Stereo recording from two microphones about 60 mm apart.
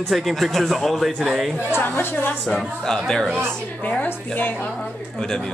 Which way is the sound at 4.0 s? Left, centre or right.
Left.